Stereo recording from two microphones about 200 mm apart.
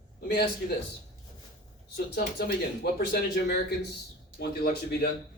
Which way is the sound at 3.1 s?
50° left (ahead or behind).